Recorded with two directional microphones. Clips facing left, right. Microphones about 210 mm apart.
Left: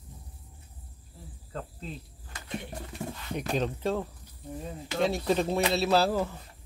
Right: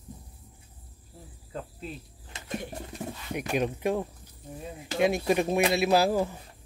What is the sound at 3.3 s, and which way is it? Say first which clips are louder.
Speech: right 2 dB; 10° right (ahead or behind).